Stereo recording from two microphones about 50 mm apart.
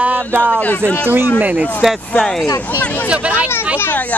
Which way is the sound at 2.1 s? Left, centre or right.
Centre.